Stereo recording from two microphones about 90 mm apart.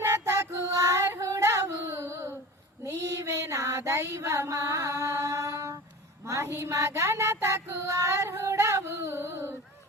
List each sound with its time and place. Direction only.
0.0 s female singing: 35° right (ahead or behind)
3.0 s child singing: 35° right (ahead or behind)
6.2 s a sound: 35° right (ahead or behind)
6.5 s child singing: 30° right (ahead or behind)